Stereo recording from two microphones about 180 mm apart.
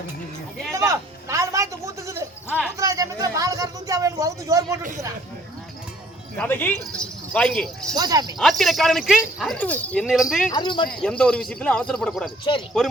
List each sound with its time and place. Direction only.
0.7 s a sound: 15° right (ahead or behind)
6.3 s speech: 10° left (ahead or behind)
7.9 s speech: 20° right (ahead or behind)
8.4 s speech: centre (ahead or behind)
10.5 s speech: 25° left (ahead or behind)
11.0 s speech: 5° left (ahead or behind)